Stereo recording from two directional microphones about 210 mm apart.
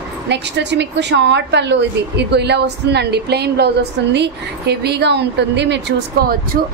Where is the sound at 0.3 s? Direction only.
55° right (ahead or behind).